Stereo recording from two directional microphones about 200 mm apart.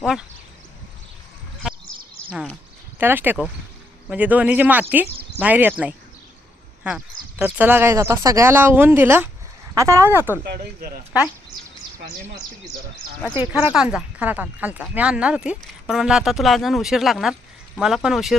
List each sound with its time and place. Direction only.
0.0 s speech: 5° right (ahead or behind)
2.3 s speech: centre (ahead or behind)
10.4 s speech: 50° right (ahead or behind)
11.5 s a sound: 20° right (ahead or behind)
13.3 s speech: 10° right (ahead or behind)